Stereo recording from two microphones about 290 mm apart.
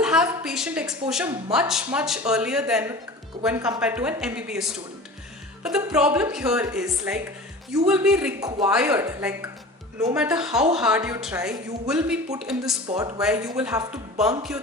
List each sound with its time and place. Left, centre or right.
0.0 s a woman's voice: centre